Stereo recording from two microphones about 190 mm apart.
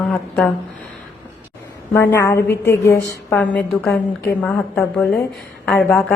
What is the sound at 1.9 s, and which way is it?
A woman's voice, 15° left (ahead or behind).